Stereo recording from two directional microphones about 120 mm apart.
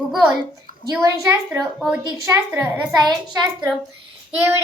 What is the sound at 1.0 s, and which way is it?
A woman's voice, 30° right (ahead or behind).